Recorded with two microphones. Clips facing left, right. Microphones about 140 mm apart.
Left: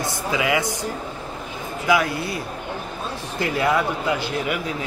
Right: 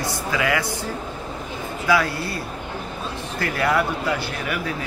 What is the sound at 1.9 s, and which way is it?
Speech, 20° left (ahead or behind).